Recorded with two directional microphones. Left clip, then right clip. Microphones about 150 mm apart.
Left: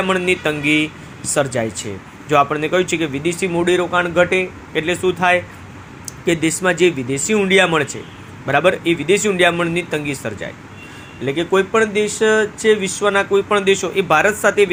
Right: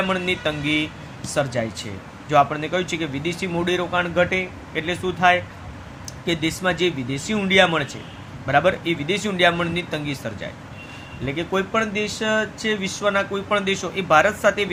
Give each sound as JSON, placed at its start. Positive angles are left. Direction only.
{"t": 0.0, "sound": "speech", "side_deg": 20}